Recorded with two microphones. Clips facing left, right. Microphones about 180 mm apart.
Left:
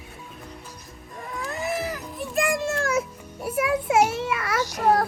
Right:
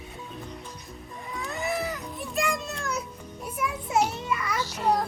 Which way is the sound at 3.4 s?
80° left.